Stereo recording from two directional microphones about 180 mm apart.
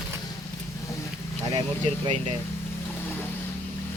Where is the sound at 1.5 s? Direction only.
30° right (ahead or behind).